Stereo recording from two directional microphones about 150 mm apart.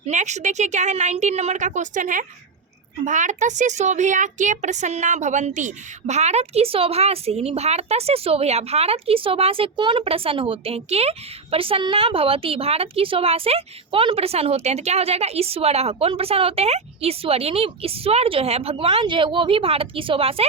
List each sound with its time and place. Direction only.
0.1 s a woman's voice: 50° right (ahead or behind)